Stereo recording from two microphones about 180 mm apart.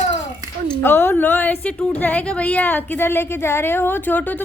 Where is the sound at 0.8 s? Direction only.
10° left (ahead or behind).